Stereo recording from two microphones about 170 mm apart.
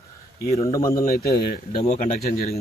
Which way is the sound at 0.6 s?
20° left (ahead or behind).